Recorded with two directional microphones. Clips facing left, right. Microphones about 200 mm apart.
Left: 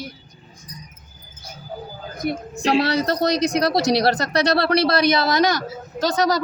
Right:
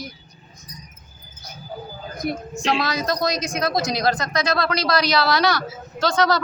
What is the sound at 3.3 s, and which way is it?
Speech, 65° left (ahead or behind).